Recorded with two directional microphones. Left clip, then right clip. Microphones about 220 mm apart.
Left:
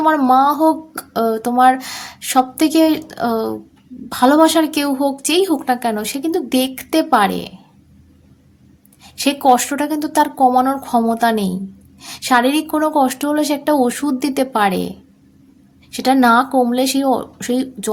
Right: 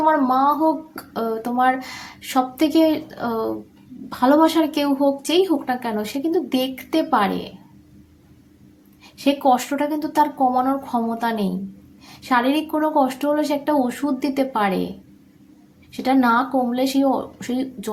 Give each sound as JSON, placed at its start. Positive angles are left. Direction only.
{"t": 0.0, "sound": "speech", "side_deg": 50}
{"t": 9.0, "sound": "speech", "side_deg": 50}
{"t": 15.9, "sound": "speech", "side_deg": 50}